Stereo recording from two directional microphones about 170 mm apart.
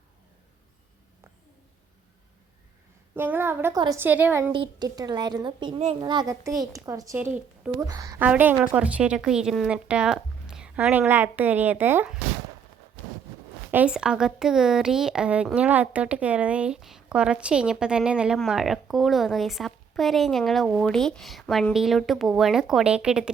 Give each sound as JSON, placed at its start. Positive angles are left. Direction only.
{"t": 3.2, "sound": "a woman's voice", "side_deg": -15}
{"t": 4.0, "sound": "a woman's voice", "side_deg": -10}
{"t": 4.5, "sound": "a child's voice", "side_deg": -25}
{"t": 7.9, "sound": "a child's voice", "side_deg": -20}
{"t": 8.2, "sound": "a woman's voice", "side_deg": -10}
{"t": 13.7, "sound": "speech", "side_deg": -10}